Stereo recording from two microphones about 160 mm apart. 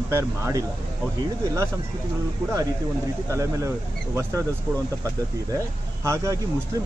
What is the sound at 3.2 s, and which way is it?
Speech, 20° right (ahead or behind).